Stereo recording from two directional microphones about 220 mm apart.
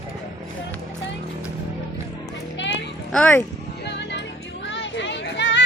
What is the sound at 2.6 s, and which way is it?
Children playing, 55° left (ahead or behind).